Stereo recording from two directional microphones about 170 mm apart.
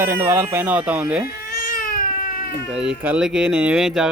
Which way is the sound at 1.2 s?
55° left (ahead or behind).